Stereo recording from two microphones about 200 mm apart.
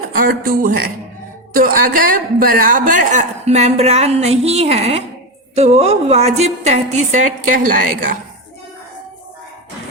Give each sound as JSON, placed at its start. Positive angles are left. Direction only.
{"t": 0.1, "sound": "a man's voice", "side_deg": -45}